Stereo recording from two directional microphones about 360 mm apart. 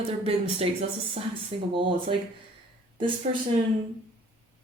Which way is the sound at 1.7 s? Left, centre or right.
Centre.